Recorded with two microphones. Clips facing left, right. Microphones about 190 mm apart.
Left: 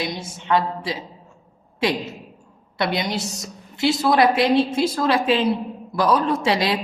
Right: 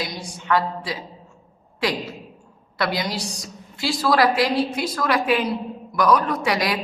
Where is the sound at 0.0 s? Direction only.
25° left (ahead or behind).